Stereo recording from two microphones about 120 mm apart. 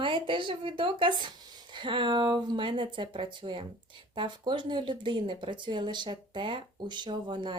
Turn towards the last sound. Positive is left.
turn(degrees=-40)  # may be behind; listen again after turning